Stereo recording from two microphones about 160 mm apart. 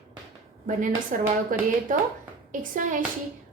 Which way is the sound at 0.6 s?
55° right (ahead or behind).